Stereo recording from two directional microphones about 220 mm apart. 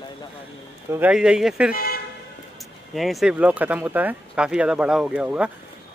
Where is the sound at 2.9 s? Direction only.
Centre (ahead or behind).